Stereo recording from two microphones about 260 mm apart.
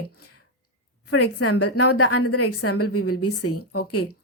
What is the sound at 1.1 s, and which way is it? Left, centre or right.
A woman's voice, left.